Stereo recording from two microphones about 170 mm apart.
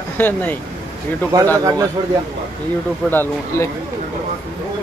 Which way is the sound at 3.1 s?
10° left (ahead or behind).